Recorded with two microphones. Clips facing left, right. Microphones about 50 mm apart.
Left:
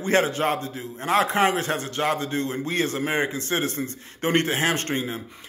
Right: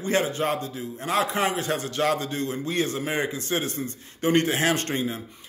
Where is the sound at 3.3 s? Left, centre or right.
Left.